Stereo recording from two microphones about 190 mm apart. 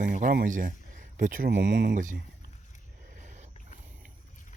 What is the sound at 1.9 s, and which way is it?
Speech, 40° right (ahead or behind).